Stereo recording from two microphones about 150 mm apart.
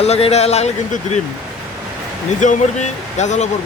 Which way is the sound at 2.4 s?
55° left (ahead or behind).